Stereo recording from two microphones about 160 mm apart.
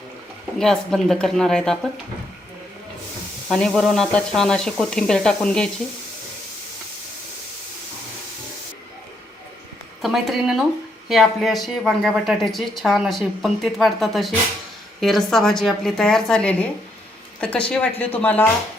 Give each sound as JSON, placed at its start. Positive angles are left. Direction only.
{"t": 0.6, "sound": "a woman's voice", "side_deg": 0}
{"t": 3.5, "sound": "a woman's voice", "side_deg": 0}
{"t": 10.0, "sound": "a woman's voice", "side_deg": 0}